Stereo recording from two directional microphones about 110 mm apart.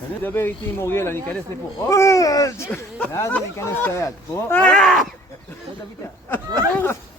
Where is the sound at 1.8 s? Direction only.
30° left (ahead or behind).